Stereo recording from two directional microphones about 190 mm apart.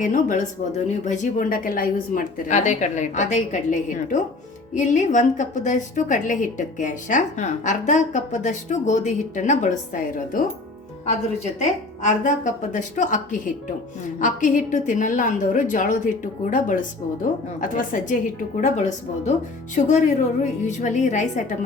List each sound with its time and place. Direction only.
0.0 s a woman's voice: 45° left (ahead or behind)
12.0 s a woman's voice: 40° left (ahead or behind)